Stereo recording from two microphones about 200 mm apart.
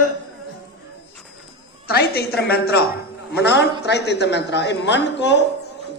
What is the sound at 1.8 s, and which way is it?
A woman's voice, 50° left (ahead or behind).